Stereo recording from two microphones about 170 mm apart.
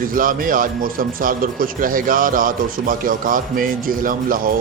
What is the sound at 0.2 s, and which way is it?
Speech, 55° right (ahead or behind).